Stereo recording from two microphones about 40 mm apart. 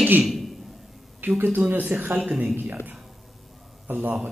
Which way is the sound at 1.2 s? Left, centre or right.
Right.